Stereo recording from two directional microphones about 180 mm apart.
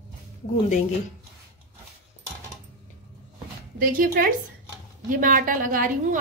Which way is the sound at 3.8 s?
55° right (ahead or behind).